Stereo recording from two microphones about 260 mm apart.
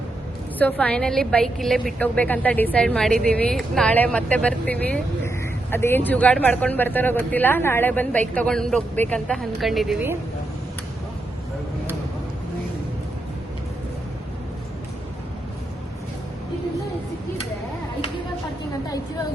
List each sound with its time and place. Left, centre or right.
0.6 s speech: centre